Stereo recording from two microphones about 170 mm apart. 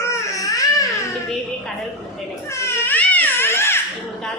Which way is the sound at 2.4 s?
15° left (ahead or behind).